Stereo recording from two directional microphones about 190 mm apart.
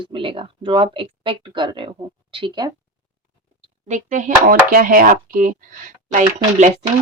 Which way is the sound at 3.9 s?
40° right (ahead or behind).